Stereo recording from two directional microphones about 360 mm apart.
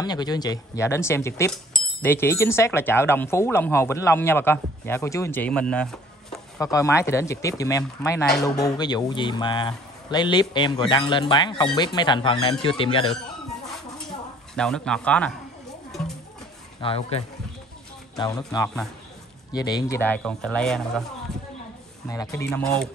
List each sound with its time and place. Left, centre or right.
0.0 s speech: centre
14.5 s speech: centre
16.8 s speech: centre
18.2 s speech: centre
22.1 s speech: centre